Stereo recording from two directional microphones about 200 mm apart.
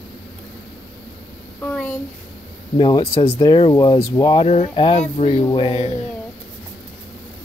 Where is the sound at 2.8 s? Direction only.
20° left (ahead or behind).